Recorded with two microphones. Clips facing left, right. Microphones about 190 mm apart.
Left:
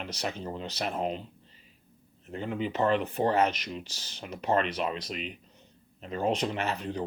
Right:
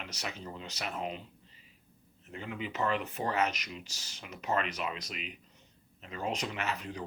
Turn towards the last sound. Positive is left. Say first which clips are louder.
# left 5 dB
turn(degrees=30)  # may be behind; listen again after turning